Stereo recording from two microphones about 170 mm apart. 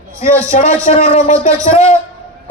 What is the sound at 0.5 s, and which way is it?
A man's voice, 50° left (ahead or behind).